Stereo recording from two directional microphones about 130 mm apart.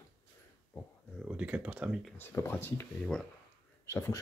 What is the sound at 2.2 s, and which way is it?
Speech, 20° left (ahead or behind).